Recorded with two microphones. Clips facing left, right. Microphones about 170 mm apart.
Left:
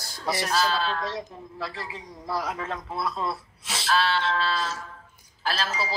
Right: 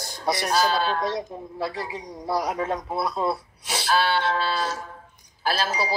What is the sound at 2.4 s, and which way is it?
Speech, 15° right (ahead or behind).